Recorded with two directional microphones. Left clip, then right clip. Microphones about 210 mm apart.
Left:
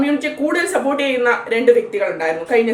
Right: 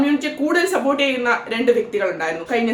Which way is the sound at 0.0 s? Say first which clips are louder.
Left 1 dB; 15° right (ahead or behind).